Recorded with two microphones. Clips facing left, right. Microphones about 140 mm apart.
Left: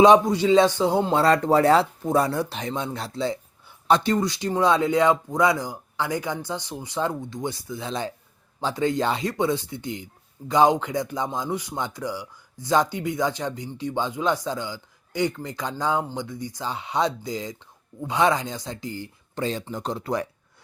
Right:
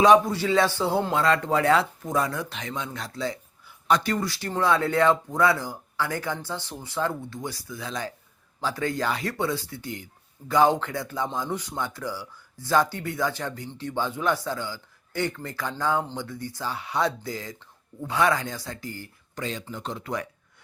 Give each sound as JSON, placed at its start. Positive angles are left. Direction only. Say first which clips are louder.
{"t": 0.0, "sound": "speech", "louder": "left 3 dB", "side_deg": 20}
{"t": 1.1, "sound": "speech", "louder": "left 6 dB", "side_deg": 35}
{"t": 19.4, "sound": "speech", "louder": "left 5 dB", "side_deg": 35}